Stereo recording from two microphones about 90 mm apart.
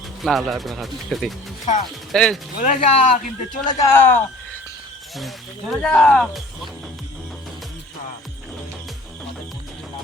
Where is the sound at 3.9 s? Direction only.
25° left (ahead or behind).